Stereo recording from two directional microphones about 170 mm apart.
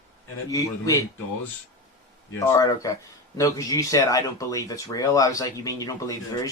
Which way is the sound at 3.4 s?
20° left (ahead or behind).